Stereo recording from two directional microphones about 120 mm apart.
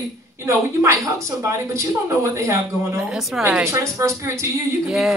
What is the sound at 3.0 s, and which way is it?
Speech, 5° right (ahead or behind).